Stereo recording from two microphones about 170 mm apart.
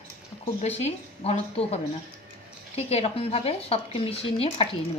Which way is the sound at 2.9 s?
35° left (ahead or behind).